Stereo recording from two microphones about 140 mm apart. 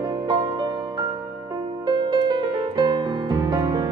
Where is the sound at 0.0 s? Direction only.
30° right (ahead or behind).